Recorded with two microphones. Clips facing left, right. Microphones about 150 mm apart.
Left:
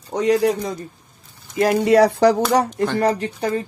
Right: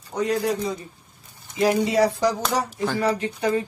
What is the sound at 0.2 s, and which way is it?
Speech, 90° left.